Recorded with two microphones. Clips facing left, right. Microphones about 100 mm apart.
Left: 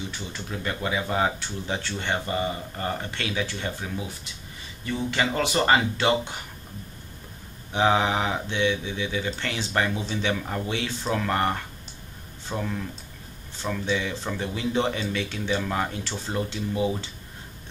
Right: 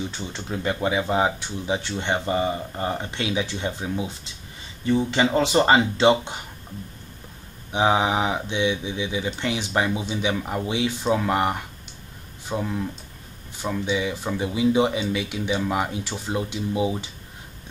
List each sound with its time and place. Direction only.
0.3 s speech: 25° right (ahead or behind)
7.7 s speech: 15° right (ahead or behind)